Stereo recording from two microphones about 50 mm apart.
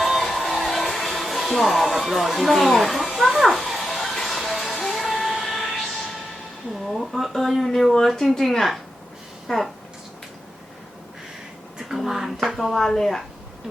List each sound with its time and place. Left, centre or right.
0.0 s music: centre
6.8 s speech: centre
11.8 s speech: centre